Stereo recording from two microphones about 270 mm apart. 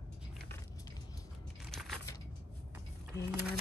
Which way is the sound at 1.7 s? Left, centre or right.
Centre.